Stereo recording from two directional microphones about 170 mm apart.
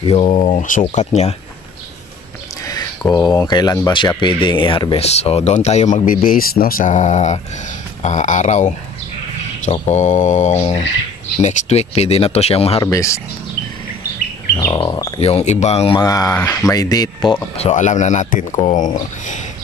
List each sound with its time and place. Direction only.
0.0 s speech: 35° left (ahead or behind)
2.6 s speech: 20° left (ahead or behind)
12.8 s speech: 20° left (ahead or behind)
14.7 s speech: 25° left (ahead or behind)
15.1 s speech: 35° left (ahead or behind)
16.0 s speech: 20° left (ahead or behind)
17.6 s speech: 45° left (ahead or behind)